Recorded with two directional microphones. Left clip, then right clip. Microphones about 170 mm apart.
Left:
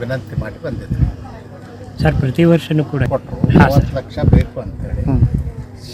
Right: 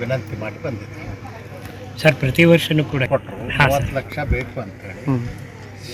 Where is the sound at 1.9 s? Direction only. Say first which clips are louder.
Right 2 dB; 50° left (ahead or behind).